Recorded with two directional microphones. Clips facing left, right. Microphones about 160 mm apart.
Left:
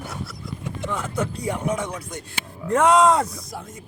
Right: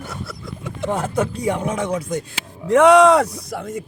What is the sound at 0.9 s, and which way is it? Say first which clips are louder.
Speech: right 6 dB; 70° right (ahead or behind).